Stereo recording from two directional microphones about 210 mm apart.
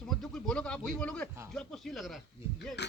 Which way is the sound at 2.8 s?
55° left (ahead or behind).